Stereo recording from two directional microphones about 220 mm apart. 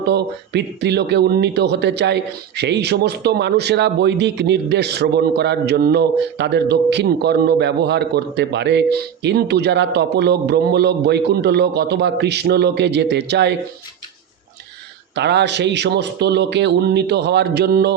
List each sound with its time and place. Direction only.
0.0 s speech: 50° right (ahead or behind)
15.1 s speech: 50° right (ahead or behind)